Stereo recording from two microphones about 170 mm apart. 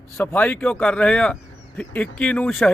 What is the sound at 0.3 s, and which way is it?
A man's voice, 10° left (ahead or behind).